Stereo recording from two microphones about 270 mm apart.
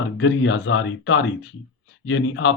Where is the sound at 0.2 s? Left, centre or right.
Left.